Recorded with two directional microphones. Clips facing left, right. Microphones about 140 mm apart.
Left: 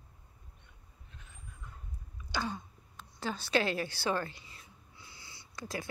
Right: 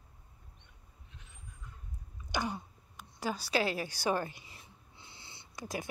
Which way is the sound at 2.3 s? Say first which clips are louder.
Right 1 dB; 15° right (ahead or behind).